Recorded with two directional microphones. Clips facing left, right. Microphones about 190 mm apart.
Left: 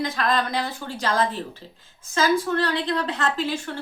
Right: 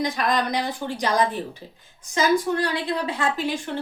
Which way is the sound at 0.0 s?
15° right (ahead or behind).